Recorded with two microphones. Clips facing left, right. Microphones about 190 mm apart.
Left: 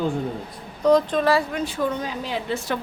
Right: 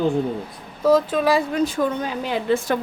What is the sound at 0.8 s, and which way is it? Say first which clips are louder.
Speech: right 1 dB; 5° right (ahead or behind).